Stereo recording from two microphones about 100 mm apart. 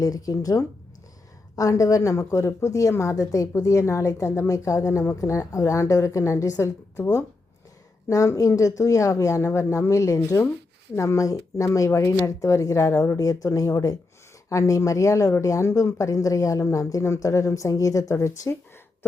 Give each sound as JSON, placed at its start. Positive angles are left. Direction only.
{"t": 0.0, "sound": "a woman's voice", "side_deg": 40}